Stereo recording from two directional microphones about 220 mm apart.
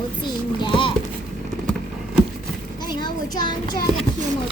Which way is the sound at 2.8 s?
20° left (ahead or behind).